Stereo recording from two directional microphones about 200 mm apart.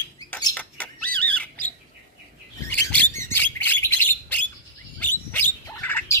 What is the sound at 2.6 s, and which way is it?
Bird, 10° left (ahead or behind).